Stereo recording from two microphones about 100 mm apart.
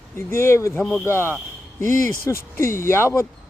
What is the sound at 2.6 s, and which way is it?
Speech, 25° left (ahead or behind).